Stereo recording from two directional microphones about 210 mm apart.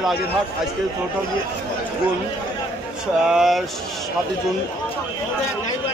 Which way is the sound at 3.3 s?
Centre (ahead or behind).